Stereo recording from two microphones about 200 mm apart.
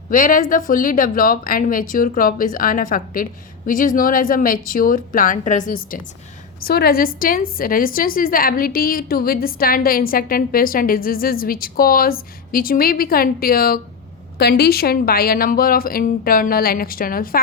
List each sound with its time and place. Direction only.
0.1 s a woman's voice: 45° left (ahead or behind)